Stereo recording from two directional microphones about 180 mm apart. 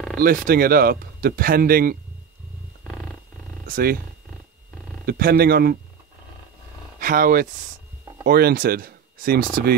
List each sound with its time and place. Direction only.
0.2 s speech: 55° right (ahead or behind)
2.9 s purr: centre (ahead or behind)
3.6 s speech: 55° right (ahead or behind)
5.0 s speech: 55° right (ahead or behind)
7.0 s speech: 50° right (ahead or behind)